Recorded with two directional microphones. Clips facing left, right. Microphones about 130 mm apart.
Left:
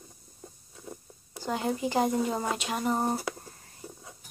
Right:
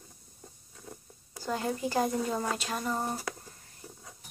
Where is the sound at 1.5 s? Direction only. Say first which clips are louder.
Left 2 dB; 5° left (ahead or behind).